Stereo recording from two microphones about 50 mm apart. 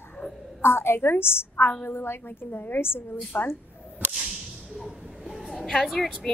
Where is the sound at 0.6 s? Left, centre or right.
Left.